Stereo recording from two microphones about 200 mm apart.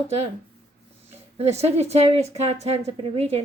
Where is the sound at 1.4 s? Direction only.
30° right (ahead or behind).